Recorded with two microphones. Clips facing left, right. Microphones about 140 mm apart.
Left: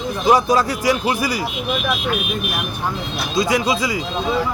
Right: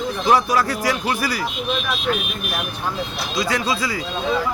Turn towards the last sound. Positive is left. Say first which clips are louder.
# left 4 dB
turn(degrees=15)  # may be behind; listen again after turning